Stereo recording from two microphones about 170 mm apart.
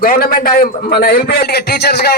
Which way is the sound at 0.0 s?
60° left (ahead or behind).